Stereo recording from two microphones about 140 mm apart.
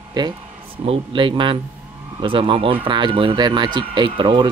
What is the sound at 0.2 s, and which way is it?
Speech, 30° right (ahead or behind).